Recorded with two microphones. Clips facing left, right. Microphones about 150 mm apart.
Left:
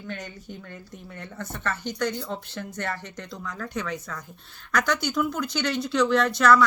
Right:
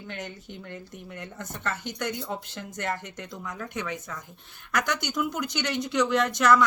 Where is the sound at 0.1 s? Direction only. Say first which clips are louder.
Left 1 dB; 20° right (ahead or behind).